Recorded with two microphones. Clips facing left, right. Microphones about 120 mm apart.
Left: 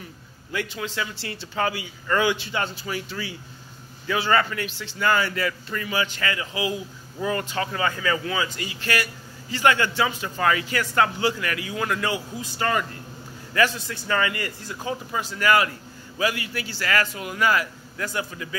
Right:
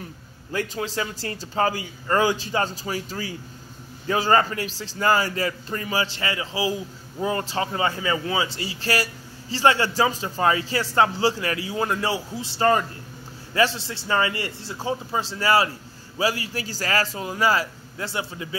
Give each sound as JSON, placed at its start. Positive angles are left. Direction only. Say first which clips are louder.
{"t": 0.5, "sound": "a man's voice", "louder": "right 2 dB", "side_deg": -35}